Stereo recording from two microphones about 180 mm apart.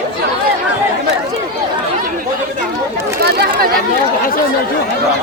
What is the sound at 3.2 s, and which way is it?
Chatter, 60° right (ahead or behind).